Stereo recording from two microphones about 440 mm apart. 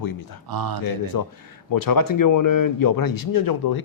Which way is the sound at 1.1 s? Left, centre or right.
Left.